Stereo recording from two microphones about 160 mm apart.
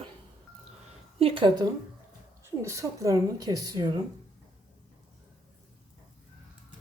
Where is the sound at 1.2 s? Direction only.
35° right (ahead or behind).